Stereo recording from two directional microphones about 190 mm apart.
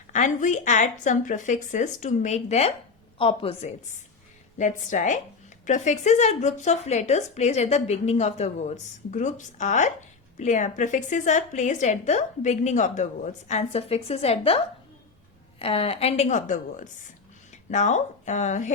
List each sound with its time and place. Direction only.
0.1 s speech: 40° left (ahead or behind)
4.5 s speech: 40° left (ahead or behind)